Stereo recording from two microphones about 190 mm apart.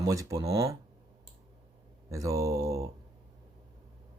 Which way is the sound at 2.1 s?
15° right (ahead or behind).